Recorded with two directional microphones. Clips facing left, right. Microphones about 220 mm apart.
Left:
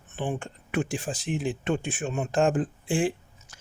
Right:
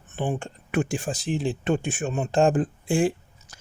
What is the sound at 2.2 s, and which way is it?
Speech, 30° right (ahead or behind).